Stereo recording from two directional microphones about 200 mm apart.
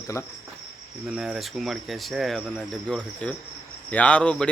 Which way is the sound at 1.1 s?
5° right (ahead or behind).